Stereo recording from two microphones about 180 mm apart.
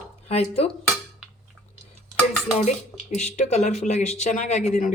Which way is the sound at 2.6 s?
40° left (ahead or behind).